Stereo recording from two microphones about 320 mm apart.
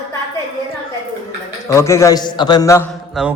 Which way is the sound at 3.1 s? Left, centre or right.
Centre.